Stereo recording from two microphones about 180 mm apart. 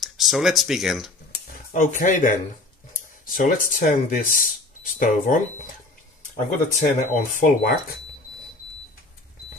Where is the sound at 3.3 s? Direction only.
50° left (ahead or behind).